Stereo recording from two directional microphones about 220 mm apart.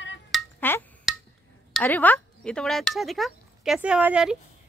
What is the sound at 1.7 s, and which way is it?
Speech, 10° left (ahead or behind).